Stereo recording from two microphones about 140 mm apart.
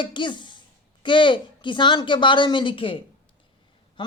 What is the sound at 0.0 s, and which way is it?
A woman's voice, 35° left (ahead or behind).